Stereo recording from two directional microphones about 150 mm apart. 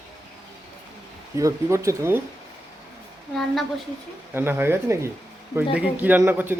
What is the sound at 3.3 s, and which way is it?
Speech, 5° left (ahead or behind).